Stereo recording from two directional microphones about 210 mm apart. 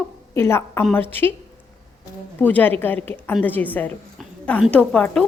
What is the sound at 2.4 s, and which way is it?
A woman's voice, 10° left (ahead or behind).